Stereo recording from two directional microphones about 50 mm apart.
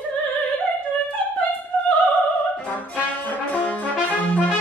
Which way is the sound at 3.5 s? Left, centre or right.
Left.